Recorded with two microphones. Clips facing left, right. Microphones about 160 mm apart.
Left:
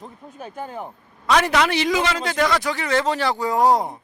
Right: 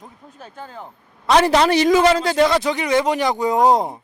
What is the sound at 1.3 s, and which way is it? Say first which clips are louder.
A man's voice: right 4 dB; 30° right (ahead or behind).